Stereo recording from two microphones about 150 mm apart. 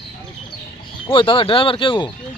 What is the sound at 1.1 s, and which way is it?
Speech, 35° left (ahead or behind).